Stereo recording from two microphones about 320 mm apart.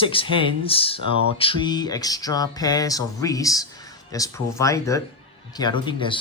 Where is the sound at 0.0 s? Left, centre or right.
Centre.